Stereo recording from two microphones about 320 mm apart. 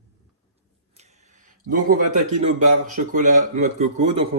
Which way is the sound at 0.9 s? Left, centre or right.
Right.